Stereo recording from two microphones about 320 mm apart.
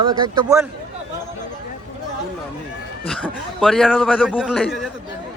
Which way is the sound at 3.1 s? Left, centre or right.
Centre.